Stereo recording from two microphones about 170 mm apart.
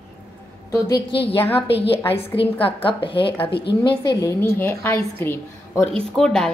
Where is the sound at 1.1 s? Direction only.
30° left (ahead or behind).